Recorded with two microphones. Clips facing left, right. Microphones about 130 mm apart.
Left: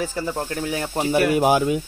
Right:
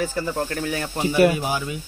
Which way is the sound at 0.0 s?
10° left (ahead or behind).